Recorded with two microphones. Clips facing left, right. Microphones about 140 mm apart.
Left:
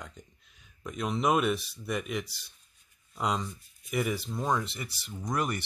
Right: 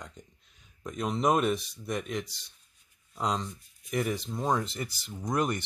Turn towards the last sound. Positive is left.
turn(degrees=-25)  # may be behind; listen again after turning